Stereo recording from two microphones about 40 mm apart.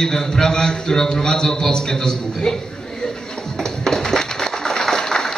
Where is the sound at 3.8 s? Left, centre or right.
Centre.